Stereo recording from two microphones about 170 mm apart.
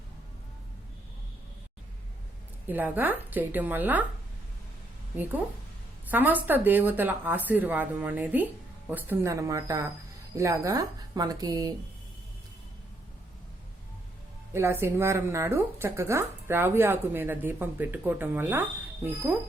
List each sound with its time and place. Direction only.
2.6 s speech: 10° right (ahead or behind)
6.1 s speech: 10° right (ahead or behind)
14.5 s speech: 15° right (ahead or behind)